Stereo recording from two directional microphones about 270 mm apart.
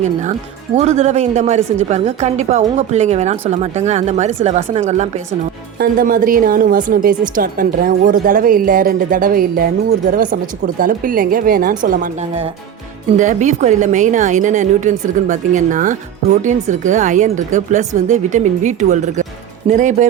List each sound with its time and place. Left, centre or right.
0.0 s a woman's voice: right
10.8 s a woman's voice: right